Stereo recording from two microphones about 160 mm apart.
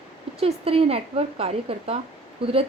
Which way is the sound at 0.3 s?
40° right (ahead or behind).